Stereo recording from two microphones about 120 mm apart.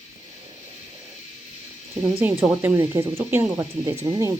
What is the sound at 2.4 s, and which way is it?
Speech, 15° right (ahead or behind).